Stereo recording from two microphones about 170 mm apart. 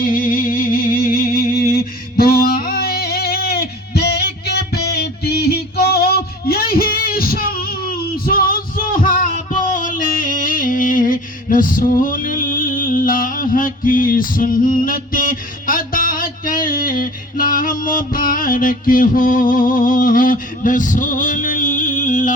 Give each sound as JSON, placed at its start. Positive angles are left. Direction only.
{"t": 0.0, "sound": "music", "side_deg": 55}